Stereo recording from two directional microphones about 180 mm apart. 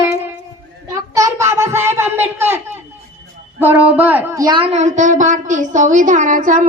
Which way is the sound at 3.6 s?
10° right (ahead or behind).